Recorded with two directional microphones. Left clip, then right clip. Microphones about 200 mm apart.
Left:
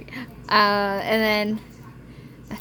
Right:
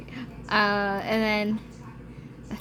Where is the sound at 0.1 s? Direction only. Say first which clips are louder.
Left 6 dB; 25° left (ahead or behind).